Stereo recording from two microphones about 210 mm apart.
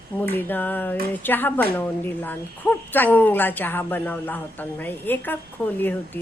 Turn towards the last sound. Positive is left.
turn(degrees=10)  # may be behind; listen again after turning